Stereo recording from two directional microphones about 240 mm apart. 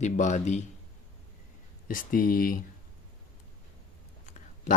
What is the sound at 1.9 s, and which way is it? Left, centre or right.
Speech, left.